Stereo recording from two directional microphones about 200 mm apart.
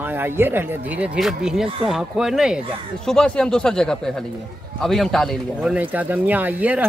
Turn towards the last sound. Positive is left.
turn(degrees=-10)  # may be behind; listen again after turning